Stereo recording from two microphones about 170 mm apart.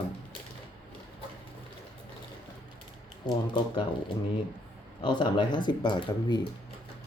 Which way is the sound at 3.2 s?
25° left (ahead or behind).